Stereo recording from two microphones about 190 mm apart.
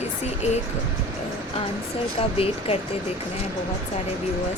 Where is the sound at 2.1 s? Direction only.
30° left (ahead or behind).